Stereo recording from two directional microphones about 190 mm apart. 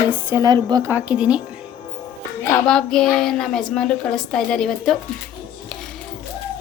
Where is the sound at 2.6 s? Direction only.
5° left (ahead or behind).